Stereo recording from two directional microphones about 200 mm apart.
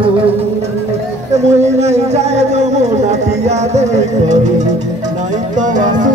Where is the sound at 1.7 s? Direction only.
35° right (ahead or behind).